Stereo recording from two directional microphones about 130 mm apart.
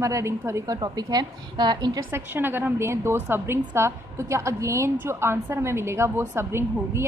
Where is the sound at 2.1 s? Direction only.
15° right (ahead or behind).